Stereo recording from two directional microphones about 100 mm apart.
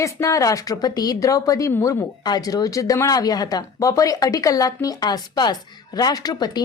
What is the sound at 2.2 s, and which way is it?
Speech, 40° left (ahead or behind).